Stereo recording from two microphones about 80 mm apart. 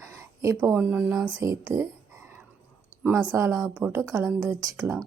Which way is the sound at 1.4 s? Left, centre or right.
Right.